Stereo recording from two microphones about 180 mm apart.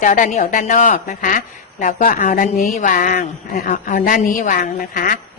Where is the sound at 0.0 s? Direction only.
45° left (ahead or behind).